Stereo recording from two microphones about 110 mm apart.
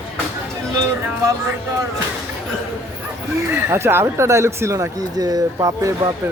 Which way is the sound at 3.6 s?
20° right (ahead or behind).